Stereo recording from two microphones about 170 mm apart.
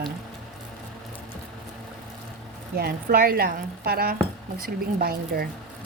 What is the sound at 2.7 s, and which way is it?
Speech, 65° right (ahead or behind).